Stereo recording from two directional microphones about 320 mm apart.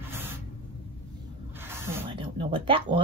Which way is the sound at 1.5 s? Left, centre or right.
Centre.